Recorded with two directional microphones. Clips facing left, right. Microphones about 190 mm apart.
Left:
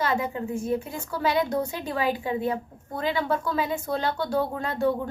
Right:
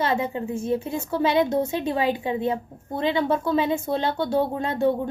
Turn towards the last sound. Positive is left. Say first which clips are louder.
# right 3 dB
turn(degrees=-25)  # may be behind; listen again after turning